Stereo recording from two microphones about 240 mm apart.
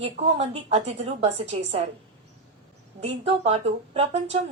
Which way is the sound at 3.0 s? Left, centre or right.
Right.